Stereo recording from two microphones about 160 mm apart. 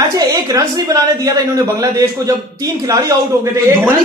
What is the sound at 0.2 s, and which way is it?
A woman's voice, 25° right (ahead or behind).